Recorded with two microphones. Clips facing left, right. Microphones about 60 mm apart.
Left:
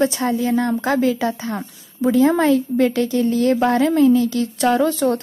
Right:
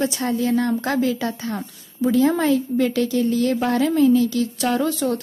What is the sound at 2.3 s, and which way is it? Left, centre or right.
Speech, left.